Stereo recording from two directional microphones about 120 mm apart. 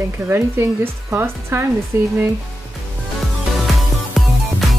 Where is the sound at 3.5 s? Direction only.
Centre (ahead or behind).